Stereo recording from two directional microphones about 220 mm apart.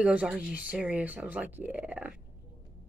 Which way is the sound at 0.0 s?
5° right (ahead or behind).